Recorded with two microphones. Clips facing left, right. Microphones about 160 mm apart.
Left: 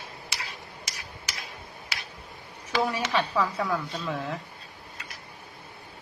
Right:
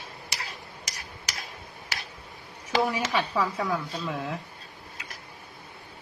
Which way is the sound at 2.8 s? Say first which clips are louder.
Even; 5° right (ahead or behind).